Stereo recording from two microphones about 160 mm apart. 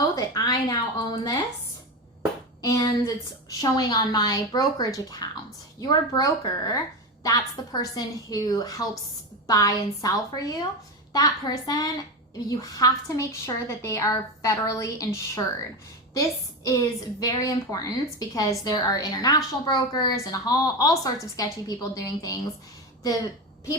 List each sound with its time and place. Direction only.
0.2 s speech: 25° left (ahead or behind)
2.6 s a woman's voice: 20° left (ahead or behind)
16.6 s a woman's voice: 20° left (ahead or behind)